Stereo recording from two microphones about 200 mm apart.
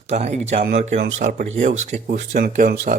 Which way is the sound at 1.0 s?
45° right (ahead or behind).